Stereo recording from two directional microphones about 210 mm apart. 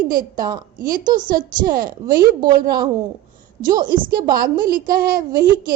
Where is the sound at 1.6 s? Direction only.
45° right (ahead or behind).